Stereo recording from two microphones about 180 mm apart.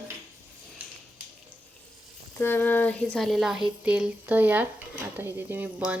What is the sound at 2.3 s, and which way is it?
Speech, 10° left (ahead or behind).